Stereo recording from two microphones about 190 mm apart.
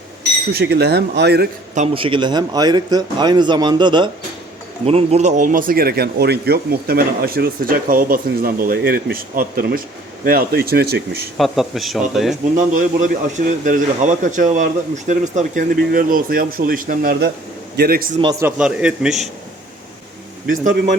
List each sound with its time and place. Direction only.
0.5 s speech: 60° right (ahead or behind)
1.7 s a man's voice: 35° right (ahead or behind); by 11.3 s 55° right (ahead or behind)
11.3 s speech: centre (ahead or behind)
12.5 s speech: 45° right (ahead or behind)
18.2 s a man's voice: 20° right (ahead or behind)
20.5 s speech: 45° right (ahead or behind)